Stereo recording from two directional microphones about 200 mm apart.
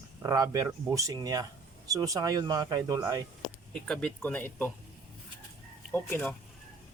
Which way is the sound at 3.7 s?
5° left (ahead or behind).